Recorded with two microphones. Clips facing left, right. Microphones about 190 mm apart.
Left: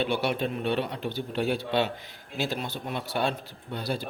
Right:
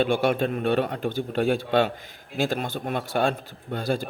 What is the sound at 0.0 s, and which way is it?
A man's voice, 45° right (ahead or behind).